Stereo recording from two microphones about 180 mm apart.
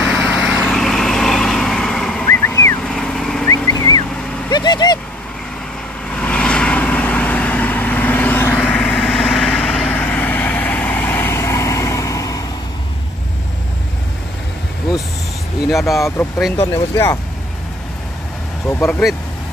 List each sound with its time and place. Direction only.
0.0 s vehicle: centre (ahead or behind)
2.2 s vehicle: 15° left (ahead or behind)
2.8 s vehicle: 5° left (ahead or behind)
3.4 s vehicle: 20° left (ahead or behind)
6.1 s vehicle: 5° left (ahead or behind)
16.5 s speech: 20° left (ahead or behind)
18.7 s speech: 10° left (ahead or behind)